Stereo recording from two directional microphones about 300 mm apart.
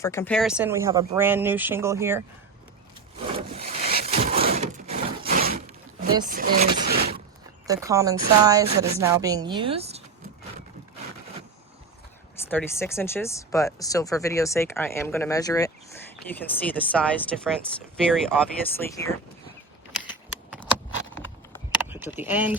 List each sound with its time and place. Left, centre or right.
0.0 s speech: centre
3.3 s a sound: right
6.2 s speech: right
7.7 s speech: centre
12.5 s speech: centre
21.8 s speech: centre